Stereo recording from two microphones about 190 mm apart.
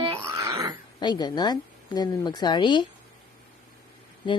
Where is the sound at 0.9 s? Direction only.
20° left (ahead or behind).